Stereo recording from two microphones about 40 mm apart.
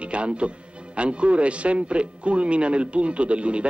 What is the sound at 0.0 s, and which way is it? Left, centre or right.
Speech, right.